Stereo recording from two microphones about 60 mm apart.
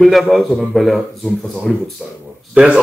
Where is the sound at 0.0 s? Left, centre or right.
Centre.